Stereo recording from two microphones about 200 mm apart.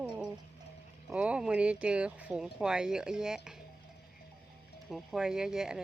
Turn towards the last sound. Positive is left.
turn(degrees=-5)  # may be behind; listen again after turning